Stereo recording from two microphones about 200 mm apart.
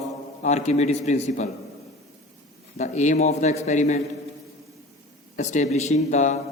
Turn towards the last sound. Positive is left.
turn(degrees=35)  # may be behind; listen again after turning